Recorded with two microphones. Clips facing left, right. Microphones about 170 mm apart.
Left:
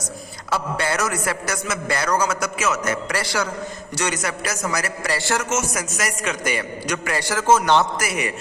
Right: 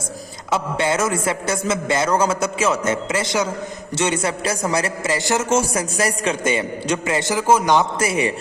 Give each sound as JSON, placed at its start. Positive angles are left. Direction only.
{"t": 0.5, "sound": "a man's voice", "side_deg": -20}
{"t": 5.5, "sound": "a man's voice", "side_deg": -30}
{"t": 7.9, "sound": "a man's voice", "side_deg": -30}